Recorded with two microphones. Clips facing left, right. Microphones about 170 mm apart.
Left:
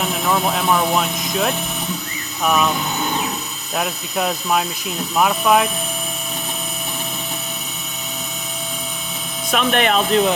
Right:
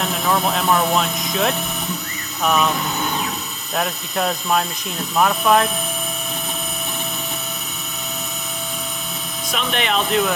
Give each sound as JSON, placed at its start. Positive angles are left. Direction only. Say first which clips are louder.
{"t": 0.0, "sound": "speech", "louder": "left 1 dB", "side_deg": 5}
{"t": 3.8, "sound": "speech", "louder": "even", "side_deg": 5}
{"t": 9.5, "sound": "speech", "louder": "left 5 dB", "side_deg": 55}
{"t": 10.1, "sound": "speech", "louder": "left 2 dB", "side_deg": 30}